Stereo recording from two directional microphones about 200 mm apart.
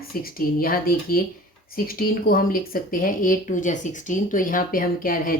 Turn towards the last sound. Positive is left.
turn(degrees=45)  # may be behind; listen again after turning